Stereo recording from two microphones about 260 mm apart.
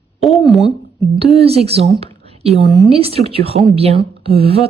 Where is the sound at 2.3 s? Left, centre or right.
Right.